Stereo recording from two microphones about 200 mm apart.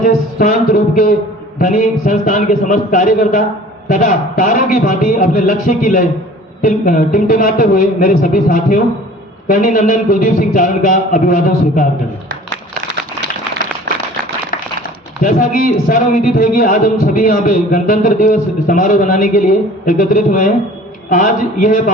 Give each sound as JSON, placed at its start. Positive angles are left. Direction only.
{"t": 0.0, "sound": "a man's voice", "side_deg": 40}
{"t": 15.2, "sound": "a man's voice", "side_deg": 45}